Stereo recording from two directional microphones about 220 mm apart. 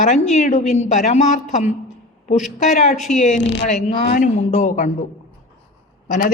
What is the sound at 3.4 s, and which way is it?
Speech, 55° left (ahead or behind).